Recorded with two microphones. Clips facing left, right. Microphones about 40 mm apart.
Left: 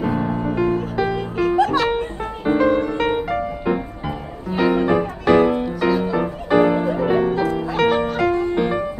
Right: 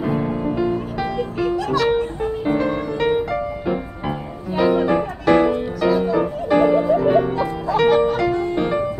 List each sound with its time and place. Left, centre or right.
0.0 s music: centre
1.6 s music: left
2.6 s music: centre